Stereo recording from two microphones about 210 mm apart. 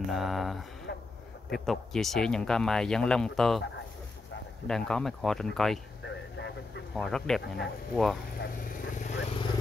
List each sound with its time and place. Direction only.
0.1 s speech: centre (ahead or behind)
0.9 s a sound: 50° left (ahead or behind)
1.5 s speech: centre (ahead or behind)
4.6 s speech: 5° left (ahead or behind)
6.0 s a sound: 55° left (ahead or behind)
7.0 s speech: centre (ahead or behind)
8.4 s vehicle: 40° left (ahead or behind)